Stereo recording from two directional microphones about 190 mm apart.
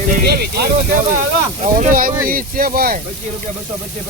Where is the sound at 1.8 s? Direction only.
45° right (ahead or behind).